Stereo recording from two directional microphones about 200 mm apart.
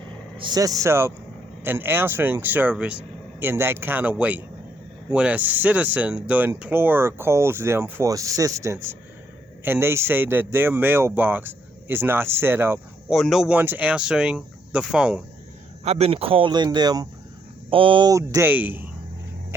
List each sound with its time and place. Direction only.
0.3 s speech: 20° right (ahead or behind)
13.1 s speech: centre (ahead or behind)
15.8 s speech: 30° right (ahead or behind); by 18.9 s 10° right (ahead or behind)